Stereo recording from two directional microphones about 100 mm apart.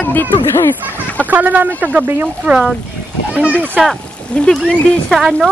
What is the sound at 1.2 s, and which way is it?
Speech, 15° right (ahead or behind).